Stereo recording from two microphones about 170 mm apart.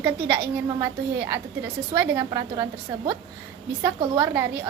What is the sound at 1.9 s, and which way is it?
Speech, 20° right (ahead or behind).